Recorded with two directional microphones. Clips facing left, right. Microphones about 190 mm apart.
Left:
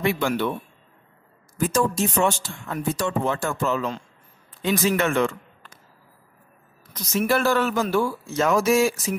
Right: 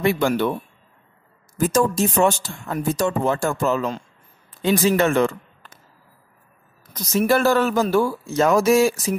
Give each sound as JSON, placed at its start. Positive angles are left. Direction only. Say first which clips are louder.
{"t": 0.0, "sound": "speech", "louder": "right 4 dB", "side_deg": -40}
{"t": 1.6, "sound": "speech", "louder": "right 3 dB", "side_deg": -40}
{"t": 6.9, "sound": "speech", "louder": "right 4 dB", "side_deg": -40}